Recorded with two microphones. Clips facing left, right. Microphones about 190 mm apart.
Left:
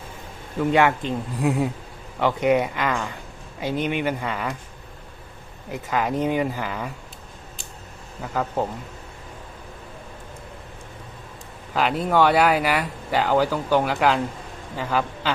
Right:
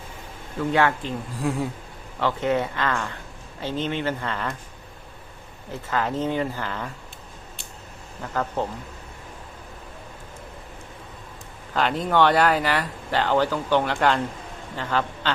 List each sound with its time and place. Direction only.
0.7 s speech: 15° left (ahead or behind)
5.7 s speech: 15° left (ahead or behind)
8.2 s speech: 10° left (ahead or behind)
11.7 s speech: 5° left (ahead or behind)